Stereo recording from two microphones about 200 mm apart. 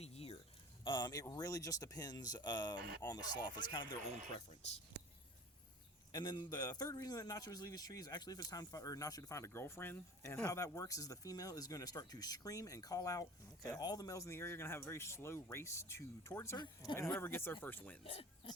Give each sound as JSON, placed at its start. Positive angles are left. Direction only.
{"t": 0.0, "sound": "a sound", "side_deg": 30}
{"t": 0.9, "sound": "speech", "side_deg": 20}
{"t": 6.1, "sound": "a man's voice", "side_deg": 20}
{"t": 18.0, "sound": "speech", "side_deg": 30}